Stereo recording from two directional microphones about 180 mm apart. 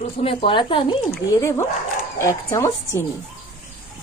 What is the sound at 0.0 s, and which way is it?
Speech, 35° left (ahead or behind).